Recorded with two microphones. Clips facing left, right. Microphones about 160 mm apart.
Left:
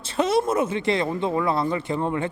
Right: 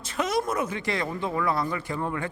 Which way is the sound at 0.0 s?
30° left (ahead or behind).